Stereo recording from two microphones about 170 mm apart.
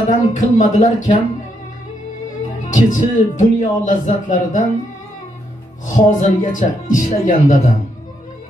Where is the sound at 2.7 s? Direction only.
45° left (ahead or behind).